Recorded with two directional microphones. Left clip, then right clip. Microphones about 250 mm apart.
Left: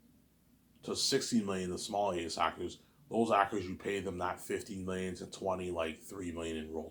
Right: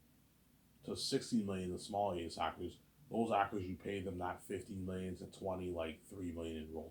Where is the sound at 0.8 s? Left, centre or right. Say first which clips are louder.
Left 7 dB; left.